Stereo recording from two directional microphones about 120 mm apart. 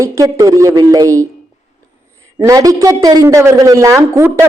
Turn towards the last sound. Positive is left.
turn(degrees=-20)  # may be behind; listen again after turning